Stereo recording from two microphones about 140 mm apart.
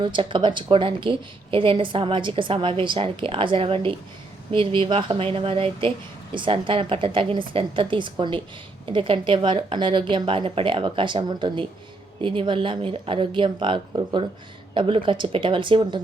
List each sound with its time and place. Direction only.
0.0 s a woman's voice: 35° right (ahead or behind)